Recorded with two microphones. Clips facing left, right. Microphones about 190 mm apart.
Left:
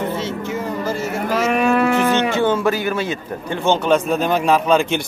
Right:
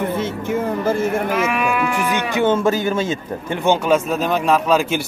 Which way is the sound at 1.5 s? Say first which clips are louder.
Left 4 dB; 35° left (ahead or behind).